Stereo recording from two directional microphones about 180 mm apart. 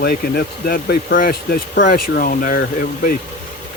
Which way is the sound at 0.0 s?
55° left (ahead or behind).